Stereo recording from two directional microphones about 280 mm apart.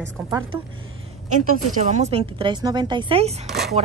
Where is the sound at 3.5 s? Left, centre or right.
Centre.